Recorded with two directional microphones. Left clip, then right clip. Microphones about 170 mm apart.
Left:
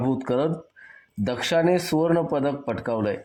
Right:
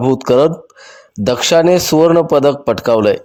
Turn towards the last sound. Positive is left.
turn(degrees=-40)  # may be behind; listen again after turning